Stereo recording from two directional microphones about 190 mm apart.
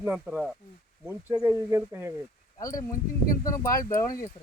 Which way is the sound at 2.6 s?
20° left (ahead or behind).